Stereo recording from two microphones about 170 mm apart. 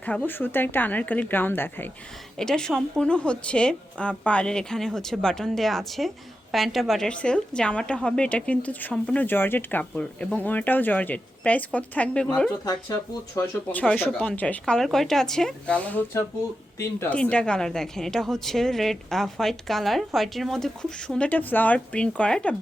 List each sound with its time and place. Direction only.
0.3 s a woman's voice: 10° left (ahead or behind)
12.6 s speech: 20° left (ahead or behind)
13.7 s a woman's voice: 10° left (ahead or behind)